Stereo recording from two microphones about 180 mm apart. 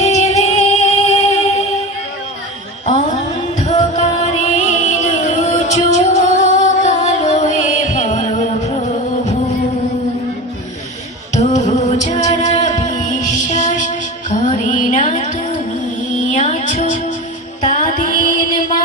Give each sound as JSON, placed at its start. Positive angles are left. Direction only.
{"t": 0.0, "sound": "music", "side_deg": 40}
{"t": 3.6, "sound": "music", "side_deg": 40}
{"t": 11.3, "sound": "music", "side_deg": 40}